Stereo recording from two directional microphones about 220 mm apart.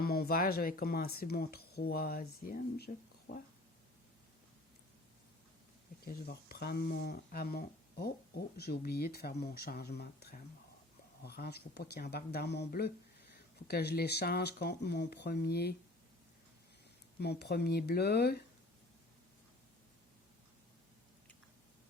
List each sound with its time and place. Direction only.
0.0 s speech: 45° left (ahead or behind)
6.1 s speech: 45° left (ahead or behind)
17.2 s speech: 50° left (ahead or behind)